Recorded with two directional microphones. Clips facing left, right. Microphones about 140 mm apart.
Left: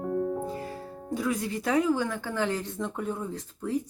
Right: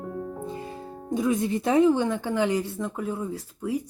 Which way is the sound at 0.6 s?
20° right (ahead or behind).